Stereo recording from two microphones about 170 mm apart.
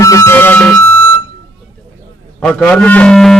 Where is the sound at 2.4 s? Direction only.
5° left (ahead or behind).